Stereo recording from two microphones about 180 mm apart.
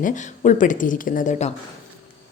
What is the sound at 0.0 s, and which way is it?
Speech, 45° left (ahead or behind).